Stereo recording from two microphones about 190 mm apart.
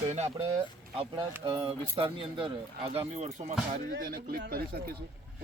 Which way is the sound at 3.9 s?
50° right (ahead or behind).